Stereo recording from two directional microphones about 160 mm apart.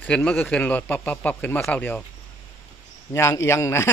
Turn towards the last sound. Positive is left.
turn(degrees=15)  # may be behind; listen again after turning